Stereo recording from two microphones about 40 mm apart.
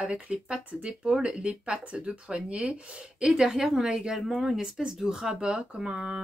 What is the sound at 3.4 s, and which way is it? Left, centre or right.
A woman's voice, centre.